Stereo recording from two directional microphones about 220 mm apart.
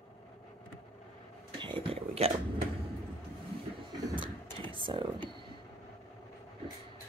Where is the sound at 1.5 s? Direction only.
25° right (ahead or behind).